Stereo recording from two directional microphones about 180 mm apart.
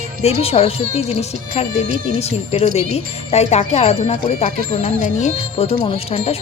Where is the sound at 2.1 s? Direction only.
35° left (ahead or behind).